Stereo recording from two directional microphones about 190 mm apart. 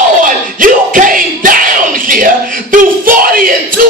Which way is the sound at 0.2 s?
45° right (ahead or behind).